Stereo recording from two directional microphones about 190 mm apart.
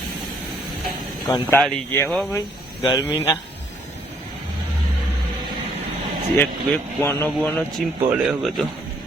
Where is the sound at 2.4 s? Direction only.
25° left (ahead or behind).